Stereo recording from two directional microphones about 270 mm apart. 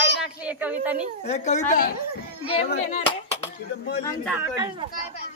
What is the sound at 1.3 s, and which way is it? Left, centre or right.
Speech, left.